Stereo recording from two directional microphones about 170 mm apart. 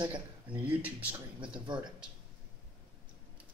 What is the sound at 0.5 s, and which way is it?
Speech, 10° right (ahead or behind).